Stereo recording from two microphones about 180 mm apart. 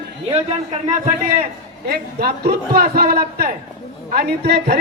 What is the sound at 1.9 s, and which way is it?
A man's voice, 60° right (ahead or behind).